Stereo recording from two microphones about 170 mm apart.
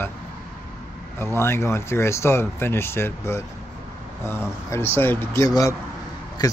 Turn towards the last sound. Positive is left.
turn(degrees=25)  # may be behind; listen again after turning